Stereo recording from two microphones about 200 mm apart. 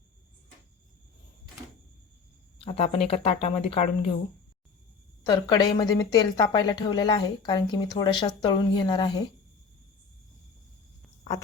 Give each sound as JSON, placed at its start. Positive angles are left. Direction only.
{"t": 2.6, "sound": "speech", "side_deg": 30}
{"t": 5.2, "sound": "speech", "side_deg": 20}